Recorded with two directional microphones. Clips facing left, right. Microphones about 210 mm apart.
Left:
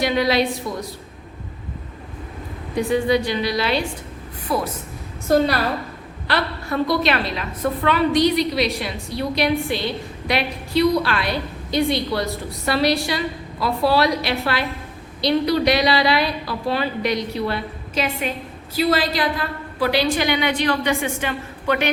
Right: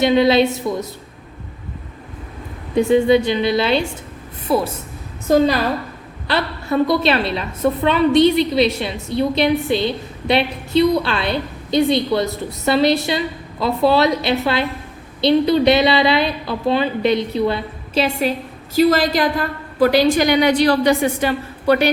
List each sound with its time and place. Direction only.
0.0 s a woman's voice: 25° right (ahead or behind)
2.7 s a woman's voice: 25° right (ahead or behind)
6.3 s a woman's voice: 25° right (ahead or behind)
18.7 s a woman's voice: 45° right (ahead or behind)